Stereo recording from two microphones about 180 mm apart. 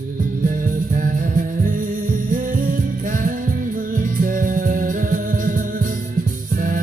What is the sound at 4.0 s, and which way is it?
Music, 50° right (ahead or behind).